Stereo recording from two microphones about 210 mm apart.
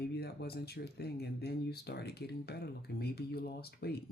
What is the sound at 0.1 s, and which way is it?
Speech, 50° left (ahead or behind).